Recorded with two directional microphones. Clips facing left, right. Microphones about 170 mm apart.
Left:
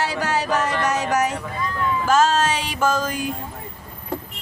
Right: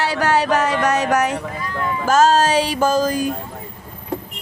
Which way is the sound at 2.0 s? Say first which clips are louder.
Right 4 dB; 40° right (ahead or behind).